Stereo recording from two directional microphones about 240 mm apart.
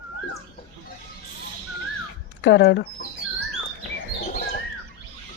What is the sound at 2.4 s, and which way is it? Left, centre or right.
Speech, left.